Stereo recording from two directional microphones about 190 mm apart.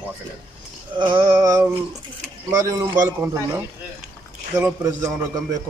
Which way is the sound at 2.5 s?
15° right (ahead or behind).